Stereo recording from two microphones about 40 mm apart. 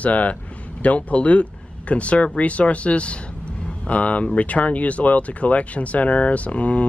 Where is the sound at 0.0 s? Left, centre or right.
Left.